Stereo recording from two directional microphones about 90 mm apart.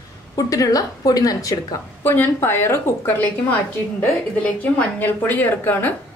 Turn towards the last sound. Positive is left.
turn(degrees=20)  # may be behind; listen again after turning